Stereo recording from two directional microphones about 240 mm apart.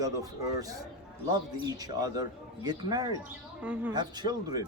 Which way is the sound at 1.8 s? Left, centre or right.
Centre.